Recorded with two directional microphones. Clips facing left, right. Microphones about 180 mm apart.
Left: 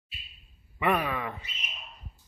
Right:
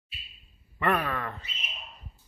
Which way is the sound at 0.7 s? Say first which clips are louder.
Even; 10° left (ahead or behind).